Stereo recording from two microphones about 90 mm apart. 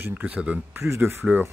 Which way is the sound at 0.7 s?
30° right (ahead or behind).